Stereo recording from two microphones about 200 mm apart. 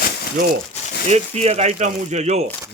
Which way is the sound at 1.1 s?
30° right (ahead or behind).